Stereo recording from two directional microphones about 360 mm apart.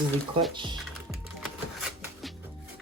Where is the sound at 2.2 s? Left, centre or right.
Centre.